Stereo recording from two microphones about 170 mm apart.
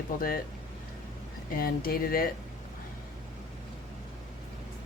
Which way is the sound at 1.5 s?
60° left (ahead or behind).